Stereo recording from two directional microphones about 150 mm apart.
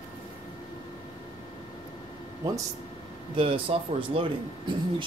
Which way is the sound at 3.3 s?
40° right (ahead or behind).